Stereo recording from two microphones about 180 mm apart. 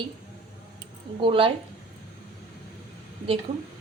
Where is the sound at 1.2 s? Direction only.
30° right (ahead or behind).